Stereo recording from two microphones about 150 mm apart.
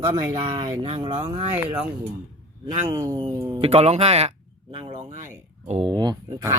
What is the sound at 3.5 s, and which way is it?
A man's voice, 40° right (ahead or behind).